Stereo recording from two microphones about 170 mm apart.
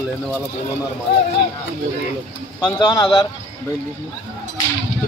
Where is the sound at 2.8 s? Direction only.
25° left (ahead or behind).